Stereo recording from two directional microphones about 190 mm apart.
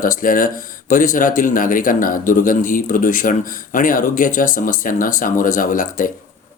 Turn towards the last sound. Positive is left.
turn(degrees=45)  # may be behind; listen again after turning